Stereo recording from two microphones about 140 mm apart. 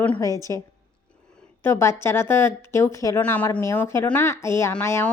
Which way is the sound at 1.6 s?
20° left (ahead or behind).